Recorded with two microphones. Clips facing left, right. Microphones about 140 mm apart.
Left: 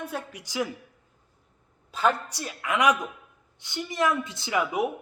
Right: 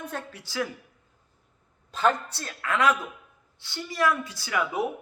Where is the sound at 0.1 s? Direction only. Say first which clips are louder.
Left 1 dB; 10° left (ahead or behind).